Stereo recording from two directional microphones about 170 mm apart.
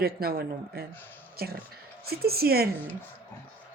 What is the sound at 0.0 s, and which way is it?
Speech, 65° right (ahead or behind).